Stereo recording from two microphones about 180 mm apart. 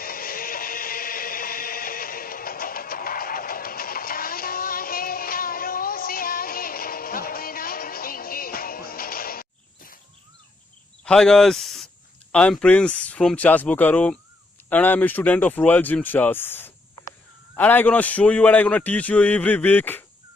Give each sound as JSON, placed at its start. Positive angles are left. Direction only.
{"t": 0.0, "sound": "music", "side_deg": 55}
{"t": 11.0, "sound": "a man's voice", "side_deg": 5}